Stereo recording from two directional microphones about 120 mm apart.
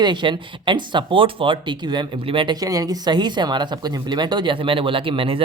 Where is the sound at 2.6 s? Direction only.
30° right (ahead or behind).